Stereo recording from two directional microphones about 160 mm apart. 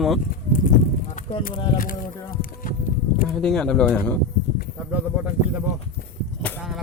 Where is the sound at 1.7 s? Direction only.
60° left (ahead or behind).